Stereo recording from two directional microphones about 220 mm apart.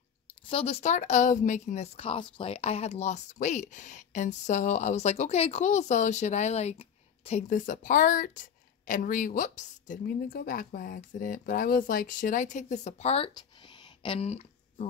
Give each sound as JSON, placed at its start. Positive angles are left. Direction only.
{"t": 0.5, "sound": "a woman's voice", "side_deg": 25}